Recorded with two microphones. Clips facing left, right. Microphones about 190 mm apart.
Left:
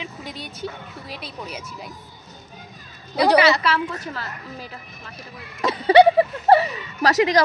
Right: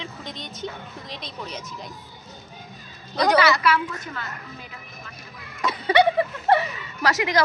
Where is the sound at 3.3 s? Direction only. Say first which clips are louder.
Even; 30° left (ahead or behind).